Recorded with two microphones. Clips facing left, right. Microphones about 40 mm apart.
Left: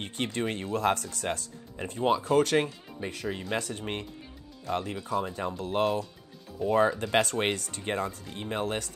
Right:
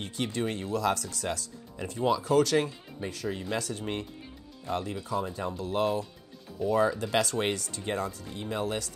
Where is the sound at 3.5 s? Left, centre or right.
Left.